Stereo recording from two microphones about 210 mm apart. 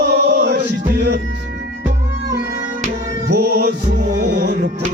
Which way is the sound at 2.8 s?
50° right (ahead or behind).